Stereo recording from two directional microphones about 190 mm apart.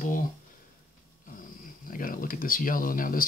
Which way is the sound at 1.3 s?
45° left (ahead or behind).